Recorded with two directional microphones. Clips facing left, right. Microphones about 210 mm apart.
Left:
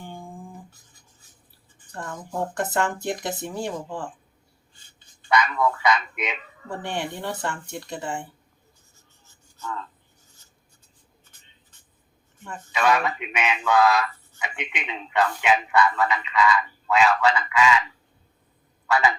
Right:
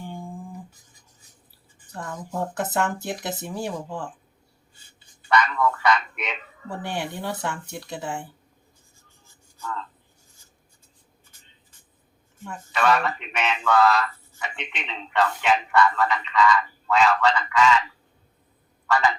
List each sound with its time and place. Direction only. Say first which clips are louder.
1.9 s speech: even; centre (ahead or behind)
5.3 s speech: even; 10° left (ahead or behind)
6.7 s speech: even; 5° right (ahead or behind)
12.7 s speech: even; 10° left (ahead or behind)
18.9 s speech: even; 10° left (ahead or behind)